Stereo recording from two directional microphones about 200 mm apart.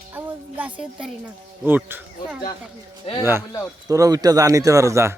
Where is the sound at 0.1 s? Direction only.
10° right (ahead or behind).